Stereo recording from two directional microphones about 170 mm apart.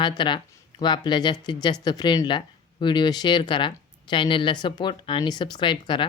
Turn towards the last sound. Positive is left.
turn(degrees=30)  # may be behind; listen again after turning